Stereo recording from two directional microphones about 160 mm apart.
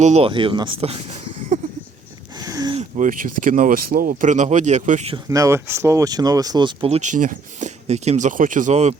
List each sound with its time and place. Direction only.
0.0 s speech: 40° right (ahead or behind)
2.4 s a sound: 25° right (ahead or behind)
2.7 s speech: 55° right (ahead or behind)
5.1 s speech: 20° right (ahead or behind); by 9.0 s 45° right (ahead or behind)